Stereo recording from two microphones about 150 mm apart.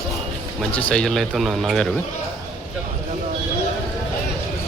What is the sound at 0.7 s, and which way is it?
Speech, 10° left (ahead or behind).